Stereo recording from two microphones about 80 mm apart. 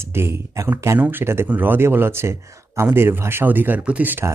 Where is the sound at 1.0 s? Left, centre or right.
Right.